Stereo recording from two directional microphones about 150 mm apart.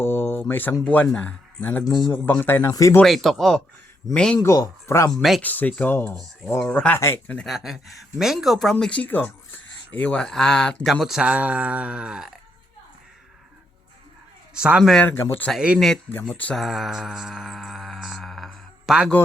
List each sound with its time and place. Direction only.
0.0 s speech: 15° left (ahead or behind)
3.0 s speech: centre (ahead or behind)
4.4 s speech: 25° left (ahead or behind)
7.4 s speech: centre (ahead or behind)
14.5 s speech: 5° right (ahead or behind)
15.0 s speech: 10° left (ahead or behind)
15.5 s speech: 5° right (ahead or behind)
16.1 s speech: 10° left (ahead or behind)